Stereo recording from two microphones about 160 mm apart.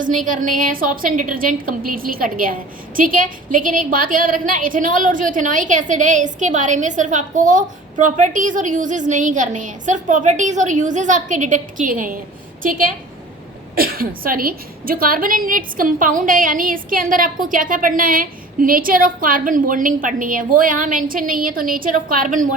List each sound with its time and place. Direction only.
0.0 s a woman's voice: 55° right (ahead or behind)
13.7 s a woman's voice: 65° right (ahead or behind)